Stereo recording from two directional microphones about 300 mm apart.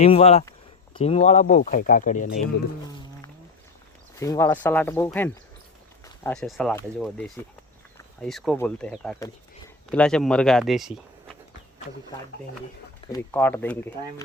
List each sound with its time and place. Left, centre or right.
0.0 s speech: centre
4.2 s speech: centre
13.1 s speech: centre